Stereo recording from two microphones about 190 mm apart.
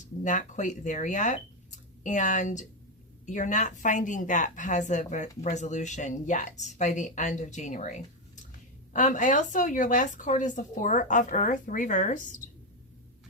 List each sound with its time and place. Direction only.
0.2 s a woman's voice: 40° left (ahead or behind)